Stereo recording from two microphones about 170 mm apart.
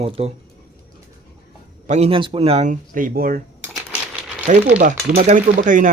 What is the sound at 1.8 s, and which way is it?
Speech, 40° right (ahead or behind).